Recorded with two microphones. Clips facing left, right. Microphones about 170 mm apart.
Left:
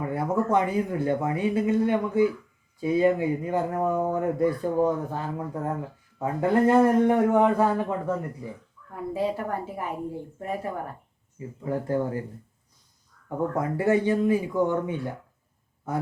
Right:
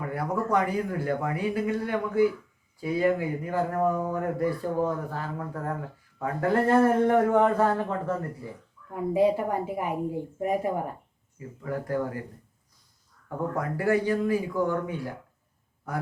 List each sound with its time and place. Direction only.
0.5 s a man's voice: 20° left (ahead or behind)
8.9 s a woman's voice: 15° right (ahead or behind)
11.3 s speech: 25° left (ahead or behind)
13.2 s speech: 20° left (ahead or behind)